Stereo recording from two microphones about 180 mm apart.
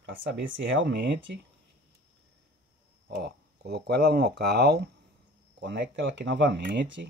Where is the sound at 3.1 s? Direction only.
65° right (ahead or behind).